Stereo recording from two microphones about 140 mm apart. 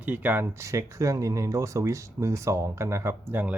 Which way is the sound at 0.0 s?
10° right (ahead or behind).